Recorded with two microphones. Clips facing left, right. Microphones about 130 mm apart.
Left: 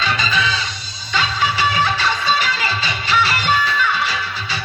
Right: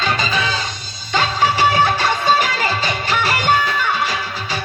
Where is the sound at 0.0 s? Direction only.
50° right (ahead or behind).